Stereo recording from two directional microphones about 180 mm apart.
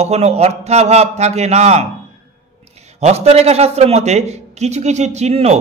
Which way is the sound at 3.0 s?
35° right (ahead or behind).